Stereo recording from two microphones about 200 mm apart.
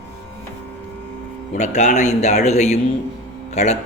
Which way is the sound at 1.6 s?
35° left (ahead or behind).